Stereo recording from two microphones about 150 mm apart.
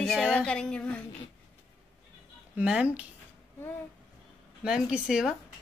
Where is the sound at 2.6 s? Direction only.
10° right (ahead or behind).